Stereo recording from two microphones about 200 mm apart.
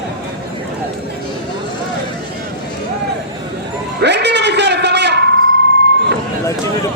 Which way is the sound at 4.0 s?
55° right (ahead or behind).